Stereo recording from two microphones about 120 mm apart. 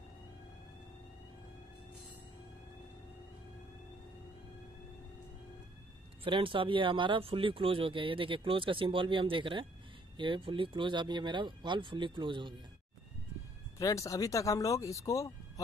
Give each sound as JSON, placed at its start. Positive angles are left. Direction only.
{"t": 6.2, "sound": "speech", "side_deg": -45}
{"t": 13.7, "sound": "speech", "side_deg": 25}